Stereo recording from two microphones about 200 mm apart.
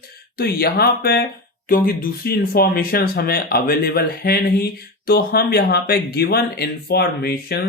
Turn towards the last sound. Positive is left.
turn(degrees=50)  # may be behind; listen again after turning